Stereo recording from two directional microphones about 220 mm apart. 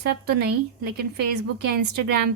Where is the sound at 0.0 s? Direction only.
45° right (ahead or behind).